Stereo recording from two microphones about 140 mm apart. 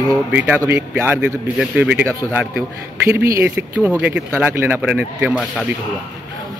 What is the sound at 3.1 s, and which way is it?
Speech, 20° right (ahead or behind).